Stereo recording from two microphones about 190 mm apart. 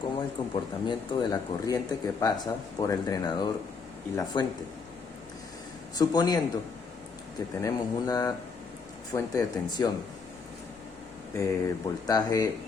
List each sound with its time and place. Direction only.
0.2 s speech: 20° left (ahead or behind)
6.0 s speech: 20° left (ahead or behind)
7.6 s speech: 20° left (ahead or behind)
11.3 s speech: 15° left (ahead or behind)